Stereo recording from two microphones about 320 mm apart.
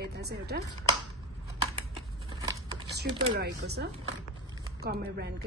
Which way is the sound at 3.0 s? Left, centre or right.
Right.